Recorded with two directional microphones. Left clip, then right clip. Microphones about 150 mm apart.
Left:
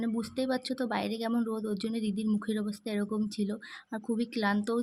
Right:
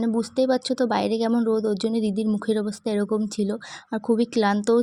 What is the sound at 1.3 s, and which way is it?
Speech, 30° right (ahead or behind).